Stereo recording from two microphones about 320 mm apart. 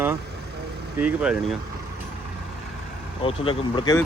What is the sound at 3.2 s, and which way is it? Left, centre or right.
Speech, centre.